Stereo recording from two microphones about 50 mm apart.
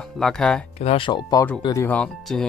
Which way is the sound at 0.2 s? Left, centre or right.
Centre.